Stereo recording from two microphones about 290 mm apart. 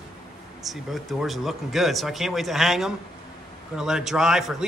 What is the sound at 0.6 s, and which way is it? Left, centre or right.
Speech, centre.